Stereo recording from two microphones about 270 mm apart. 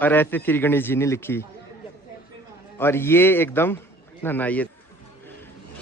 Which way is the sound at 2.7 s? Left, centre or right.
Centre.